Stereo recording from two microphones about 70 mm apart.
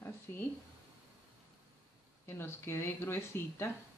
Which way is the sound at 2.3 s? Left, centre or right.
Left.